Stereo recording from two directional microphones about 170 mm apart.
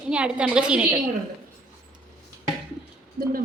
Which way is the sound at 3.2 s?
60° right (ahead or behind).